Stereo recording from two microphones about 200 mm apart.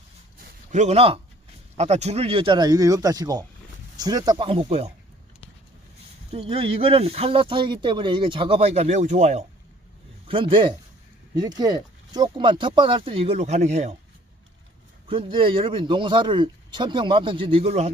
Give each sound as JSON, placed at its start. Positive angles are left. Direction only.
{"t": 0.4, "sound": "a sound", "side_deg": -35}
{"t": 1.8, "sound": "speech", "side_deg": -35}
{"t": 6.3, "sound": "speech", "side_deg": -30}
{"t": 15.0, "sound": "speech", "side_deg": -25}